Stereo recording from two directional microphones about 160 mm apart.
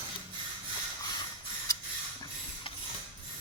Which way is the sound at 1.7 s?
20° left (ahead or behind).